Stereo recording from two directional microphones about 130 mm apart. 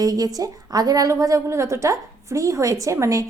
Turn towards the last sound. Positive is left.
turn(degrees=-20)  # may be behind; listen again after turning